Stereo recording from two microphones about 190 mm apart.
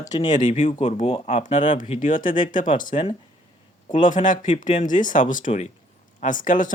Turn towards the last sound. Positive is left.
turn(degrees=45)  # may be behind; listen again after turning